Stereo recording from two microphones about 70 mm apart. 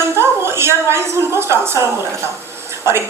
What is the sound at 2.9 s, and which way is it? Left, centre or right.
Speech, right.